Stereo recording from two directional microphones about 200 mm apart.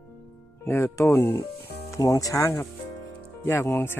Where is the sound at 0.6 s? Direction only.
10° left (ahead or behind).